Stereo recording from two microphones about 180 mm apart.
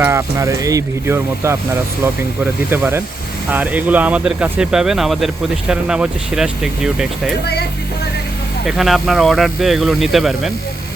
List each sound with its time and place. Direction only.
0.0 s speech: 15° right (ahead or behind)
8.6 s speech: centre (ahead or behind)